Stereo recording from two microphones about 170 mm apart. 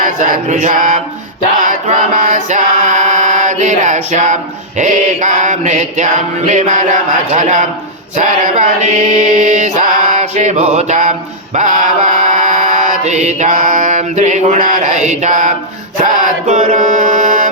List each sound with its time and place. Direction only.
0.0 s music: 50° right (ahead or behind)
1.6 s chant: 50° right (ahead or behind)
4.8 s music: 45° right (ahead or behind)
8.1 s chant: 45° right (ahead or behind)
11.5 s mantra: 50° right (ahead or behind)